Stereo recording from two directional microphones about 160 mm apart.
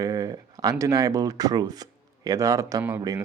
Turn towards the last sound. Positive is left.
turn(degrees=-20)  # may be behind; listen again after turning